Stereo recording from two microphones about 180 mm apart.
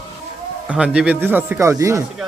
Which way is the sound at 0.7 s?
5° right (ahead or behind).